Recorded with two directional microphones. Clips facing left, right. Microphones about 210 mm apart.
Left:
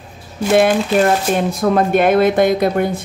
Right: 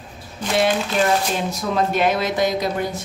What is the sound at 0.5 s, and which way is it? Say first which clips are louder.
Speech: left 7 dB; 55° left (ahead or behind).